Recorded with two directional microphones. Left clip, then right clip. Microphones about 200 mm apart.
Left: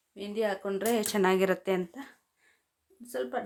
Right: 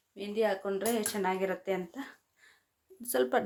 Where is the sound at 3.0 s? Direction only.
30° right (ahead or behind).